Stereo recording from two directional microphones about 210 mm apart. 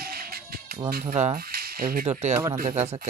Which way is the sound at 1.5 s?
45° right (ahead or behind).